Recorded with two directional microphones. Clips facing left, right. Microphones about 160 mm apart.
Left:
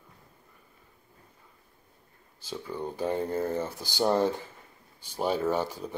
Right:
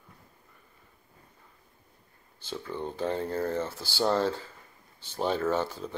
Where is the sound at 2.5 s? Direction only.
10° left (ahead or behind).